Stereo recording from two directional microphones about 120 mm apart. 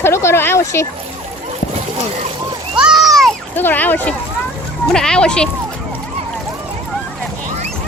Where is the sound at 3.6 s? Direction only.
15° left (ahead or behind).